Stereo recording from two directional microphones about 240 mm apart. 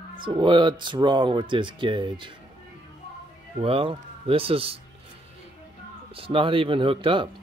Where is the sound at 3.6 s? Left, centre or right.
Right.